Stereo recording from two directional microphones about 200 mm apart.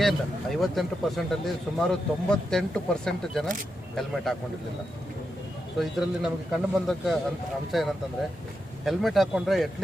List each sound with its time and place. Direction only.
0.0 s speech: centre (ahead or behind)
5.8 s speech: centre (ahead or behind)